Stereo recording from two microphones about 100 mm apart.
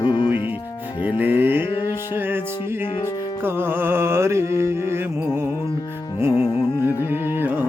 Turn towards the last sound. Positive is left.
turn(degrees=-20)  # may be behind; listen again after turning